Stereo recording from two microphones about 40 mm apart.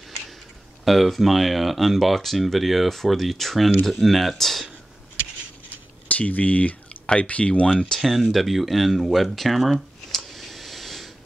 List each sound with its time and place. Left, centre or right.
0.8 s speech: centre
6.0 s speech: left
8.0 s speech: centre